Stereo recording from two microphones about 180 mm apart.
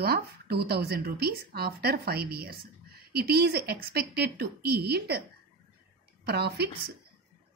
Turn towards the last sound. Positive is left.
turn(degrees=-65)  # may be behind; listen again after turning